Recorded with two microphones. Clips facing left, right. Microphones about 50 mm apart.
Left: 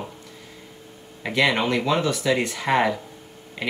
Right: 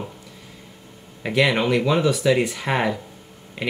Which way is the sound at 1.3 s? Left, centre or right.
Centre.